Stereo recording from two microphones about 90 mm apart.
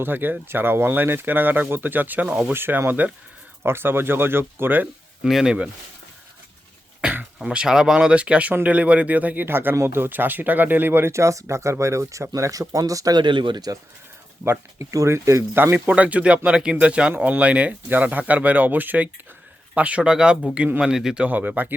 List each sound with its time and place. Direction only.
0.0 s speech: 20° right (ahead or behind)
5.2 s speech: 5° right (ahead or behind)
7.0 s throat clearing: 20° right (ahead or behind)
7.3 s speech: 10° right (ahead or behind); by 13.1 s 40° right (ahead or behind)
13.1 s speech: 60° right (ahead or behind)
14.8 s speech: 35° right (ahead or behind)
15.5 s speech: 20° right (ahead or behind); by 21.2 s 5° right (ahead or behind)
21.2 s speech: 20° right (ahead or behind)